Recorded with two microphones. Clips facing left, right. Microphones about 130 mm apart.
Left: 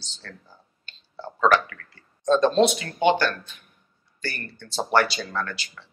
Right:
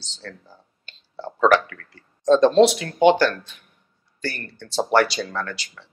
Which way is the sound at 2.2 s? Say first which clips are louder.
Right 4 dB; 90° right.